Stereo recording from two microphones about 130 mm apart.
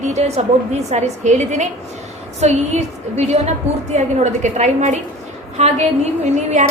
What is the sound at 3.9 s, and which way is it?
A woman's voice, 65° right (ahead or behind).